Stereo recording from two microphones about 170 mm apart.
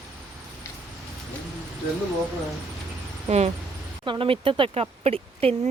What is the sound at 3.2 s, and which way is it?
Speech, 40° right (ahead or behind).